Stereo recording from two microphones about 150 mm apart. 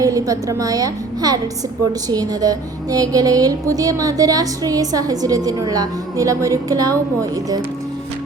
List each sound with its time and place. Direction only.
0.0 s a woman's voice: 20° right (ahead or behind)